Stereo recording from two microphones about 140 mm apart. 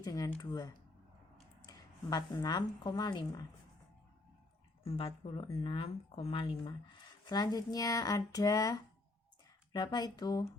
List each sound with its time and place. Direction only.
0.0 s speech: 25° left (ahead or behind)
4.9 s speech: 45° left (ahead or behind)
7.3 s speech: 30° left (ahead or behind)